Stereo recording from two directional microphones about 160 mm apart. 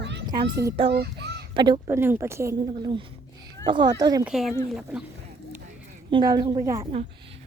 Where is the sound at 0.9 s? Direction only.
90° right.